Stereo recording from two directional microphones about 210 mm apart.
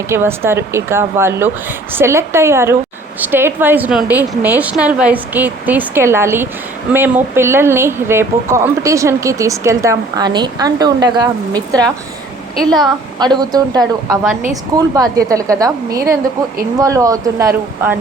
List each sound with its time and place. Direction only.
0.1 s a woman's voice: 10° right (ahead or behind)